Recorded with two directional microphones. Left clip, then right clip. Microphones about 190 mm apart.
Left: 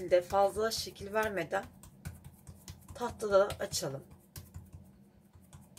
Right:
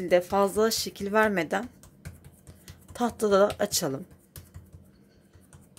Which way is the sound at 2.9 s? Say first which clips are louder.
Right 5 dB; 55° right (ahead or behind).